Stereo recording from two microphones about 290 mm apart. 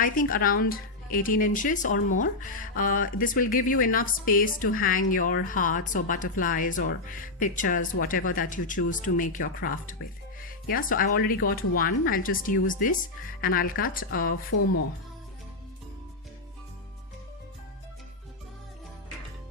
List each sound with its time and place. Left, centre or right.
0.0 s speech: left